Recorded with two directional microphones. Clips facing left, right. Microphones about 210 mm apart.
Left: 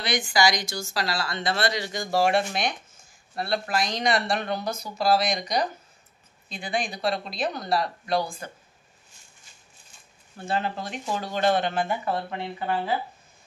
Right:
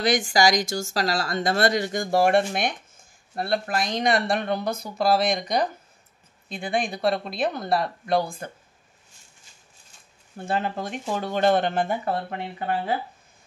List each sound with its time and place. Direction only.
0.0 s speech: 45° right (ahead or behind)
10.4 s speech: 50° right (ahead or behind)